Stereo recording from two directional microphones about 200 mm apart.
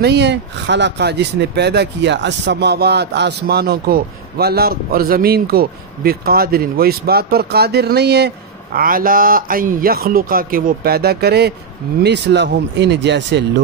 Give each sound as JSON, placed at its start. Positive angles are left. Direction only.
{"t": 0.0, "sound": "speech", "side_deg": -60}
{"t": 8.7, "sound": "speech", "side_deg": -45}